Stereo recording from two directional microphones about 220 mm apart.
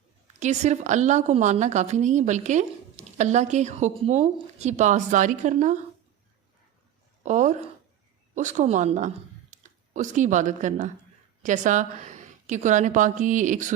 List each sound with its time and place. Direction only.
0.3 s speech: 30° right (ahead or behind)
7.3 s speech: 35° right (ahead or behind)